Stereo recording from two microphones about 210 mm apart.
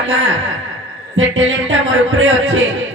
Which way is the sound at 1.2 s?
65° right (ahead or behind).